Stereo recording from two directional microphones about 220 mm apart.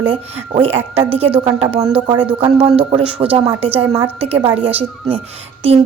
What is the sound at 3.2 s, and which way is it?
Speech, 10° right (ahead or behind).